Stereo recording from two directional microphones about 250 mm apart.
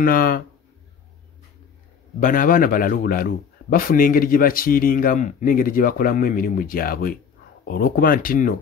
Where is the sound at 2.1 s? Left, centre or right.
Left.